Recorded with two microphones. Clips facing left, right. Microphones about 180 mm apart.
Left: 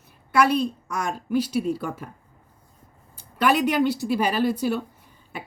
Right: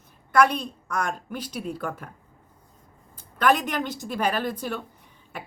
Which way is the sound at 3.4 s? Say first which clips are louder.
Left 3 dB; 10° left (ahead or behind).